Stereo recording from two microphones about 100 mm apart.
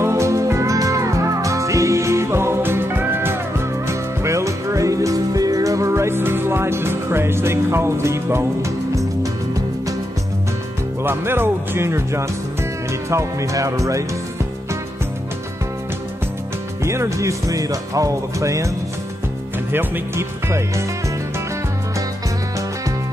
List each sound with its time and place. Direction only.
0.0 s music: 30° right (ahead or behind)
11.1 s speech: 25° right (ahead or behind)
16.8 s music: 30° right (ahead or behind)
19.7 s speech: 20° right (ahead or behind)